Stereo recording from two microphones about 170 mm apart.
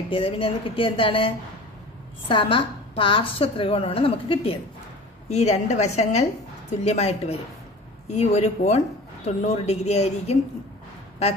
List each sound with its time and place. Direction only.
0.1 s a woman's voice: 30° left (ahead or behind)